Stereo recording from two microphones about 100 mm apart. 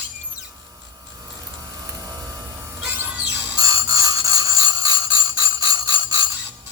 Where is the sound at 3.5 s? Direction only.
35° right (ahead or behind).